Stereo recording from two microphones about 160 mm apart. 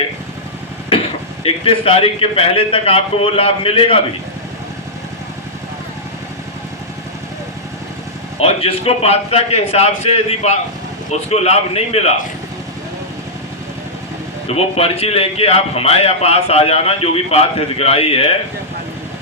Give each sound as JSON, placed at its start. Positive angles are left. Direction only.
{"t": 1.5, "sound": "a man's voice", "side_deg": 35}
{"t": 8.4, "sound": "a man's voice", "side_deg": 35}
{"t": 14.4, "sound": "a man's voice", "side_deg": 40}